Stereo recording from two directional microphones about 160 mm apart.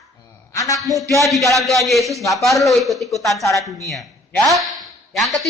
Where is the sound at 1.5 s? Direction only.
Centre (ahead or behind).